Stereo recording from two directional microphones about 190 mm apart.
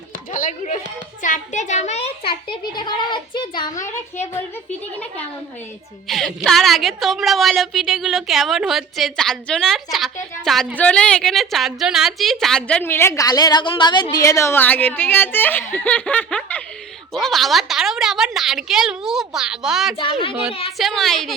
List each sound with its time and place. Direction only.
0.1 s a sound: 45° left (ahead or behind)
1.2 s a child's voice: 40° left (ahead or behind); by 3.8 s 25° left (ahead or behind)
4.4 s a child's voice: 10° left (ahead or behind)
20.0 s a child's voice: 30° left (ahead or behind)
20.7 s a woman's voice: centre (ahead or behind)